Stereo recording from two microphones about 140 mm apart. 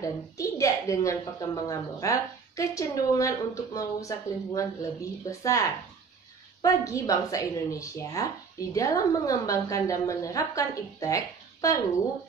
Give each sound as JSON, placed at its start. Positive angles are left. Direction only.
{"t": 0.0, "sound": "speech", "side_deg": 25}